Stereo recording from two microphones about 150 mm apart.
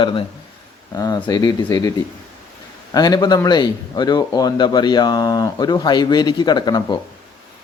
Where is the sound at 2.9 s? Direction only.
25° left (ahead or behind).